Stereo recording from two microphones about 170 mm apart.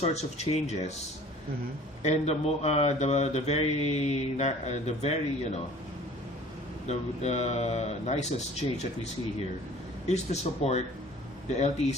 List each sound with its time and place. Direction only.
0.0 s speech: 40° left (ahead or behind)
2.0 s speech: 40° left (ahead or behind)
6.8 s speech: 40° left (ahead or behind)
10.1 s speech: 40° left (ahead or behind)